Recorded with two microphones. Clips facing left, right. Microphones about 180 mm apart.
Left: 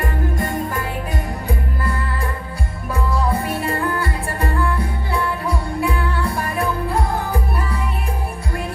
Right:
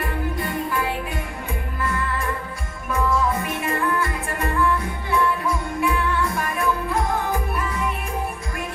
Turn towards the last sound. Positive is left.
turn(degrees=35)  # may be behind; listen again after turning